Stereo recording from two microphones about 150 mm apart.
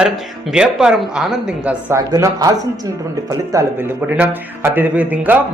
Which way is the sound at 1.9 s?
20° right (ahead or behind).